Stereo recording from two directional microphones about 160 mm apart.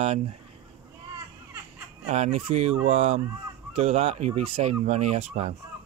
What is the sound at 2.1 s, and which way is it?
Speech, 45° right (ahead or behind).